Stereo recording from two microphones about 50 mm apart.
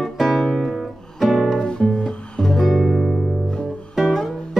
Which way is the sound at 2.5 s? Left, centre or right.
Centre.